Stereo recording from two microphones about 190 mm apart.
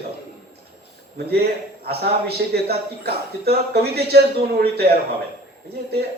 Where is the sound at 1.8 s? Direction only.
55° right (ahead or behind).